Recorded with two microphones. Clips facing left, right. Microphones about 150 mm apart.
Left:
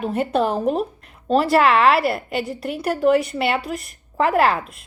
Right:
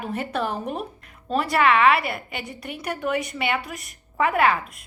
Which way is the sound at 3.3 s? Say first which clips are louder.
Left 5 dB; 35° left (ahead or behind).